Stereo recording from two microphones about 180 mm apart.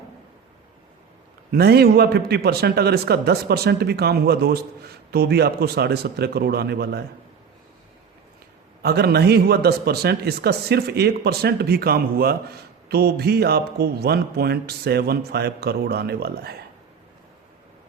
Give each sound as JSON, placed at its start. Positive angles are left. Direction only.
{"t": 1.5, "sound": "speech", "side_deg": -60}
{"t": 8.8, "sound": "speech", "side_deg": -60}